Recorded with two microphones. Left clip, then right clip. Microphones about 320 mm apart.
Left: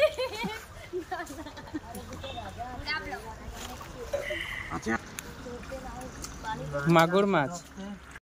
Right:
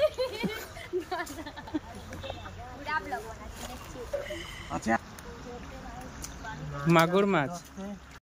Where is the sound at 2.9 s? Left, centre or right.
Centre.